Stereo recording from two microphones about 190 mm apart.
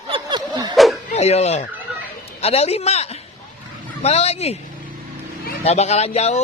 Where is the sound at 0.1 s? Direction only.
25° right (ahead or behind).